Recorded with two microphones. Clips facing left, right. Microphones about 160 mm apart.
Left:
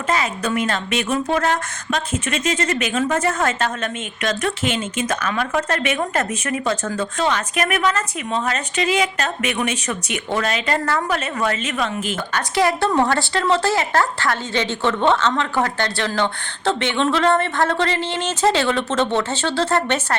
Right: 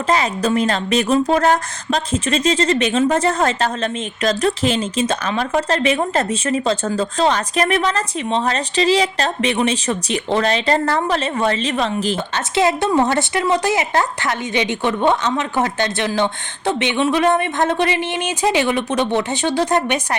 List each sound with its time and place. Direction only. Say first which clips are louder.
0.1 s speech: right 4 dB; 35° right (ahead or behind)
12.5 s a woman's voice: right 2 dB; 20° right (ahead or behind)